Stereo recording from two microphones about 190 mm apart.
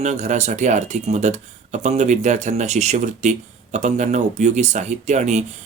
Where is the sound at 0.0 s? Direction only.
40° right (ahead or behind).